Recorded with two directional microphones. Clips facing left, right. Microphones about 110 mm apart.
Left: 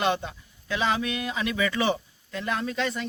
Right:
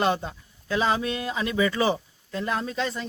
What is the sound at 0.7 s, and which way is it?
Speech, 35° right (ahead or behind).